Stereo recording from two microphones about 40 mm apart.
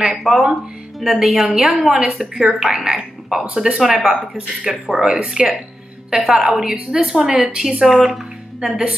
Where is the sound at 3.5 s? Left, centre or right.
Centre.